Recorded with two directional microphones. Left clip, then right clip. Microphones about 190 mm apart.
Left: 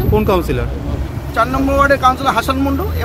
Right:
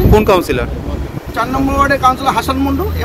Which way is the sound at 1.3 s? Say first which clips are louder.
Left 1 dB; 15° left (ahead or behind).